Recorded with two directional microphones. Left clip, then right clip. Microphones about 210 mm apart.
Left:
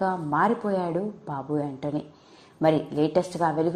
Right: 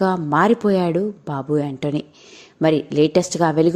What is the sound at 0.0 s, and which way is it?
A woman's voice, 85° right.